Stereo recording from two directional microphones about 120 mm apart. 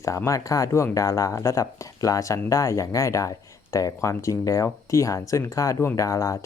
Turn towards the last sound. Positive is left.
turn(degrees=25)  # may be behind; listen again after turning